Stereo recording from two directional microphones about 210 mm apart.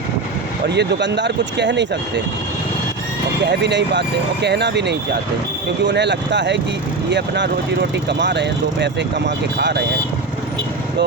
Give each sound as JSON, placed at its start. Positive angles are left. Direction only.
{"t": 0.7, "sound": "speech", "side_deg": -55}
{"t": 3.4, "sound": "speech", "side_deg": -55}